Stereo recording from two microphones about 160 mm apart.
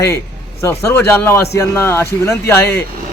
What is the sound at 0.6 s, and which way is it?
Speech, 15° left (ahead or behind).